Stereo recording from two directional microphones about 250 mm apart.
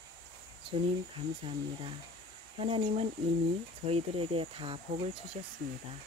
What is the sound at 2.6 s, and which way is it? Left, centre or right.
Speech, right.